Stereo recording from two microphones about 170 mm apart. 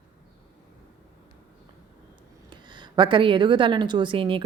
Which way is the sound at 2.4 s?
25° right (ahead or behind).